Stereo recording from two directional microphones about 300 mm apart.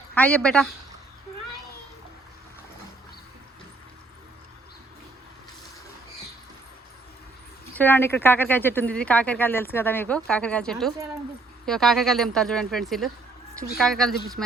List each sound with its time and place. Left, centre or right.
0.1 s speech: centre
7.8 s speech: centre